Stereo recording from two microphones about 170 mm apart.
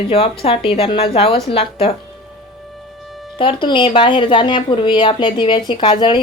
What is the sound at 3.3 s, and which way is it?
Speech, 30° left (ahead or behind).